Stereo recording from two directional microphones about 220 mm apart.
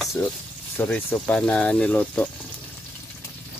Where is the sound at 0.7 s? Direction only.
5° left (ahead or behind).